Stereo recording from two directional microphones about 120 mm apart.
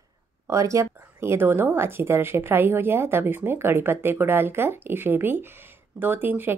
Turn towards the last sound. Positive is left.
turn(degrees=-15)  # may be behind; listen again after turning